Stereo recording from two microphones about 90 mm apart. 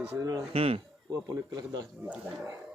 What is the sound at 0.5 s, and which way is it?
Speech, 90° right.